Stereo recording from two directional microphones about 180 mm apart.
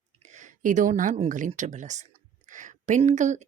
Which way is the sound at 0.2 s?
40° right (ahead or behind).